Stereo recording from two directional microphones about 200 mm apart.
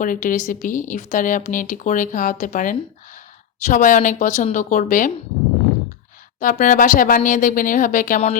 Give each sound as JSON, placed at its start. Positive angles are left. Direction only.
{"t": 0.0, "sound": "speech", "side_deg": 40}
{"t": 6.4, "sound": "speech", "side_deg": 40}